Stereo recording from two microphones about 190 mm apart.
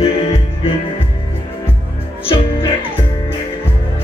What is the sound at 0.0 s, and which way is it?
Music, 30° left (ahead or behind).